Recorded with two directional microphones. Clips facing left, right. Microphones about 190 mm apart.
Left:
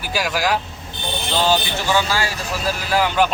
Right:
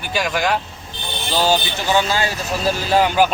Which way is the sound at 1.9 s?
20° right (ahead or behind).